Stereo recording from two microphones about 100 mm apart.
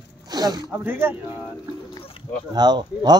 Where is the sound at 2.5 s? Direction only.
45° right (ahead or behind).